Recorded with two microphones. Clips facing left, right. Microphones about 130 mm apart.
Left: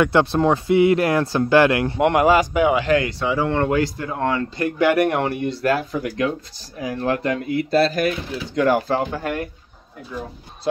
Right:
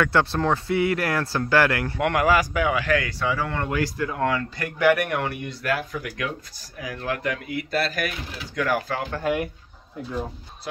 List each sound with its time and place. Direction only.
0.0 s speech: 20° left (ahead or behind)
9.3 s speech: centre (ahead or behind)